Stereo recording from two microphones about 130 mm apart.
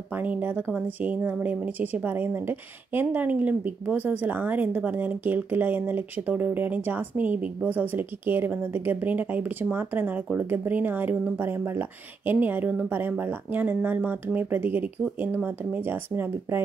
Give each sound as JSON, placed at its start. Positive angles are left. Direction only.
{"t": 0.2, "sound": "speech", "side_deg": -15}